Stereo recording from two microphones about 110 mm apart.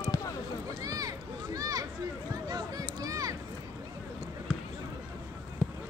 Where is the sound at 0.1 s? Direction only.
30° left (ahead or behind).